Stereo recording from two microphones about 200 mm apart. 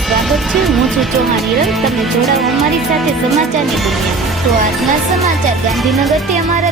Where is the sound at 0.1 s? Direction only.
Centre (ahead or behind).